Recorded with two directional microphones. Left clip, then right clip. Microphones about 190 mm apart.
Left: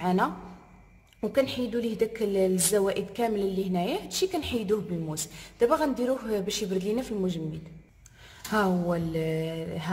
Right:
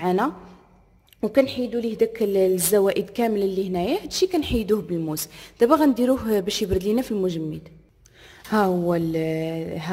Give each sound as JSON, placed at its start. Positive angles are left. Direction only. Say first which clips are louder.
{"t": 0.0, "sound": "a woman's voice", "louder": "right 4 dB", "side_deg": -30}
{"t": 8.5, "sound": "a woman's voice", "louder": "right 5 dB", "side_deg": -30}